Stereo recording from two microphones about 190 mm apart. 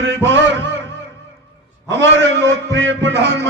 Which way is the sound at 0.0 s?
70° right (ahead or behind).